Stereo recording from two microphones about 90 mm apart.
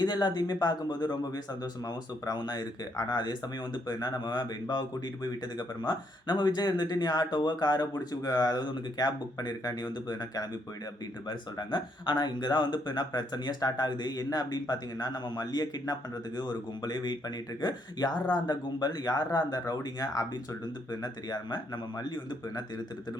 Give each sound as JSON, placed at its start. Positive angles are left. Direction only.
{"t": 0.0, "sound": "speech", "side_deg": 50}
{"t": 3.2, "sound": "speech", "side_deg": 55}